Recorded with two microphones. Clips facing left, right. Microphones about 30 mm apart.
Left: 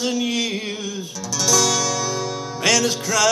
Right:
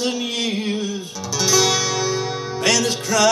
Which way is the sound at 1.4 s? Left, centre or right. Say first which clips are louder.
Right 1 dB; right.